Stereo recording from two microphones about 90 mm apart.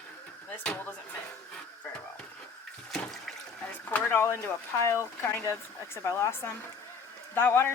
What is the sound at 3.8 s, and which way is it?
Speech, 20° left (ahead or behind).